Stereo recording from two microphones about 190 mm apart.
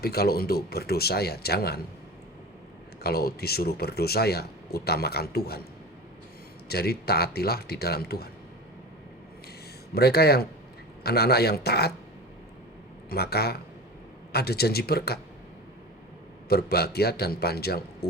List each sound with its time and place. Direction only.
0.0 s speech: 55° left (ahead or behind)
3.0 s speech: 55° left (ahead or behind)
6.7 s speech: 55° left (ahead or behind)
9.9 s speech: 55° left (ahead or behind)
13.1 s speech: 55° left (ahead or behind)
16.5 s speech: 55° left (ahead or behind)